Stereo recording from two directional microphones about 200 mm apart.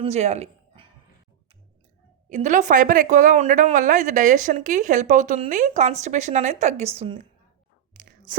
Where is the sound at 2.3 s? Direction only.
35° right (ahead or behind).